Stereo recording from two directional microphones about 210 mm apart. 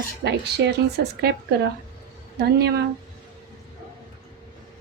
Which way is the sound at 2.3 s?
50° right (ahead or behind).